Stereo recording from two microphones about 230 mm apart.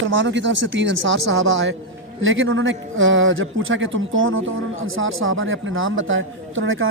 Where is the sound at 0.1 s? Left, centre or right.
Right.